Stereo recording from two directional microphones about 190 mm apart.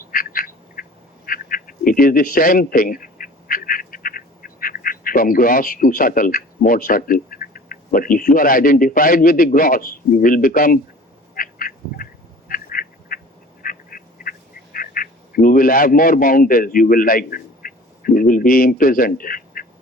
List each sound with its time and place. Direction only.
0.0 s duck: 45° left (ahead or behind)